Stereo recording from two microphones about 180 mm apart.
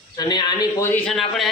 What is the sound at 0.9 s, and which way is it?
Speech, 5° left (ahead or behind).